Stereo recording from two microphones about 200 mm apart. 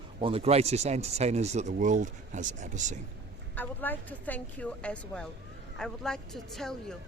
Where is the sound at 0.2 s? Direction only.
25° right (ahead or behind).